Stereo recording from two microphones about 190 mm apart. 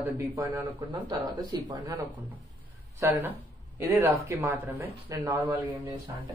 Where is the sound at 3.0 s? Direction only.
15° right (ahead or behind).